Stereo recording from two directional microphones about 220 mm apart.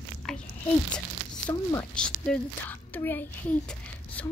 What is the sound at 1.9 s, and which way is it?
A woman's voice, 5° left (ahead or behind).